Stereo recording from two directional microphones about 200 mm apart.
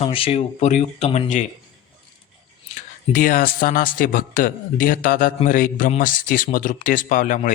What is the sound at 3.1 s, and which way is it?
Speech, 45° left (ahead or behind).